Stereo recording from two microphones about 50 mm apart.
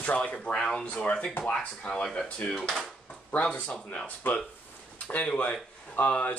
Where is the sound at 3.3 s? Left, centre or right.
Left.